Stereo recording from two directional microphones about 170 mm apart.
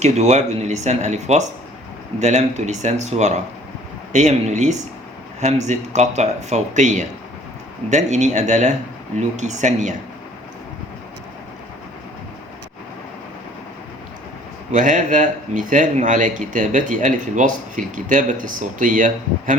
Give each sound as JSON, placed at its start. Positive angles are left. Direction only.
{"t": 0.0, "sound": "a man's voice", "side_deg": -40}
{"t": 14.7, "sound": "a man's voice", "side_deg": -50}